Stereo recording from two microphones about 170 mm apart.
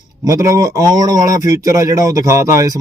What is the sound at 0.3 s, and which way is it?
Speech, 20° right (ahead or behind).